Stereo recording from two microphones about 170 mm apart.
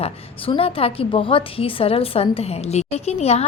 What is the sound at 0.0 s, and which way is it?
A woman's voice, 35° left (ahead or behind).